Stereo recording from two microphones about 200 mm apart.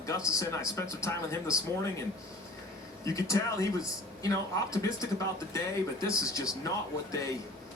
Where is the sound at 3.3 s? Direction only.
15° left (ahead or behind).